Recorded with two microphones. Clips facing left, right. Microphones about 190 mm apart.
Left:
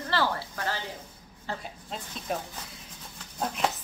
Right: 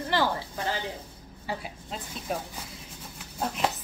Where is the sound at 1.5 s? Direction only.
5° right (ahead or behind).